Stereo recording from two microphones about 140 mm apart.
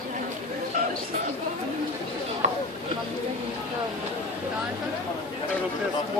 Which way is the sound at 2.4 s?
55° right (ahead or behind).